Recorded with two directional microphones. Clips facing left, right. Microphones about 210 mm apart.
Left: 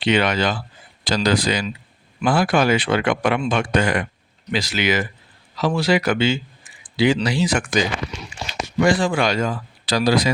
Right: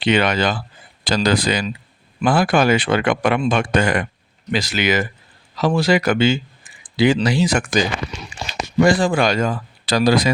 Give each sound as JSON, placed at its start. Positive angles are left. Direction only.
{"t": 0.0, "sound": "speech", "side_deg": -50}